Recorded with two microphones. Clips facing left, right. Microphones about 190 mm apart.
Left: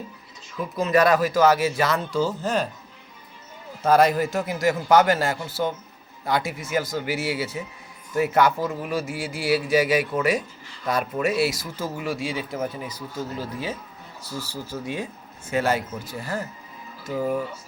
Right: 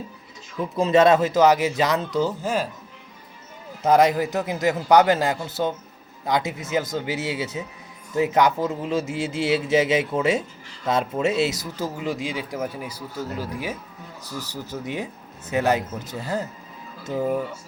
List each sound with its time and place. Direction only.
0.8 s speech: 25° right (ahead or behind)
2.4 s speech: 10° right (ahead or behind)
3.8 s speech: 15° right (ahead or behind)